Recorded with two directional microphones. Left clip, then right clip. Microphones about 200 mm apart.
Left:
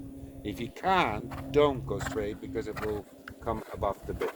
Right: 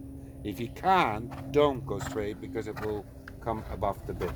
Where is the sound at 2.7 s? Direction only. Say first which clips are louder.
Even; centre (ahead or behind).